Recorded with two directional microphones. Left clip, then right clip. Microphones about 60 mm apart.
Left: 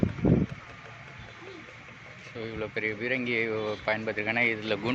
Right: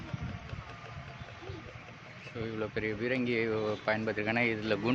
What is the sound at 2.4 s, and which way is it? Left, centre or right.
Speech, right.